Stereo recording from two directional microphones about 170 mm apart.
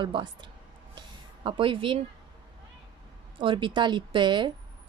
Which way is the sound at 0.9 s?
30° right (ahead or behind).